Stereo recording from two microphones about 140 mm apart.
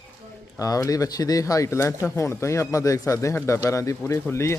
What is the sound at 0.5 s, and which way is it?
A man's voice, 25° left (ahead or behind).